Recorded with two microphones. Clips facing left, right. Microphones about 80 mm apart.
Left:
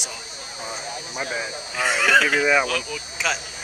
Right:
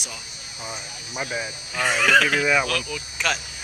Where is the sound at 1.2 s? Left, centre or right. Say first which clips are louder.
Even; left.